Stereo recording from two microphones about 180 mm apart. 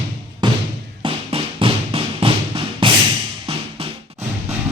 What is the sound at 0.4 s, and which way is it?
Music, 25° right (ahead or behind).